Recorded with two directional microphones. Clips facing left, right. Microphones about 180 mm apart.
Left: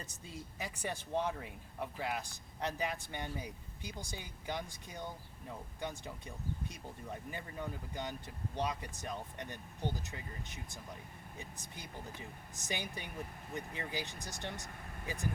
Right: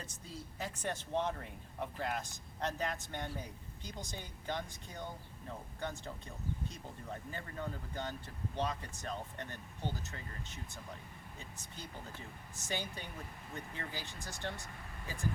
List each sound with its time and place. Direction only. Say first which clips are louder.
0.6 s speech: right 1 dB; 10° left (ahead or behind)